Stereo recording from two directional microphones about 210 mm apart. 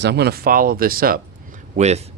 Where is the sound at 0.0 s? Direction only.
50° right (ahead or behind).